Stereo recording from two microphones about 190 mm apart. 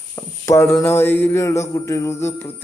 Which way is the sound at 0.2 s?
15° left (ahead or behind).